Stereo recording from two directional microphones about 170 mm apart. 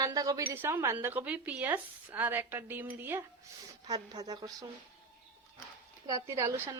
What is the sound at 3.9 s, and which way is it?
Speech, 25° right (ahead or behind).